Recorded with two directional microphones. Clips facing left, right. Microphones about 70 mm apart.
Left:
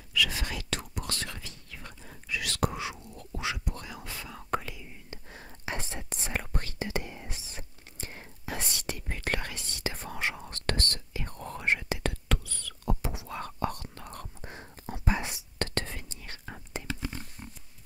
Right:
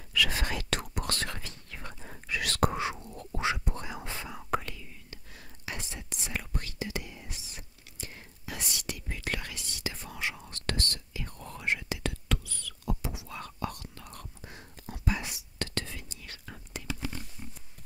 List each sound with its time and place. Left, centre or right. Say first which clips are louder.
0.1 s whispering: right 1 dB; right
4.4 s whispering: even; centre
4.8 s whispering: left 3 dB; left